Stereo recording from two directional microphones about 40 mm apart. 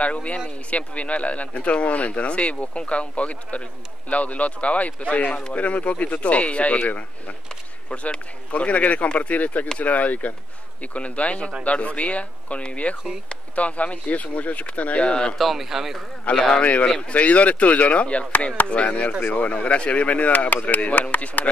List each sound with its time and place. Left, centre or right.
0.0 s speech: left
15.0 s a man's voice: left
15.3 s speech: centre
16.5 s a man's voice: left